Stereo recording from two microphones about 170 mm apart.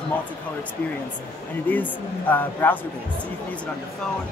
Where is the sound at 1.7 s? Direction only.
10° left (ahead or behind).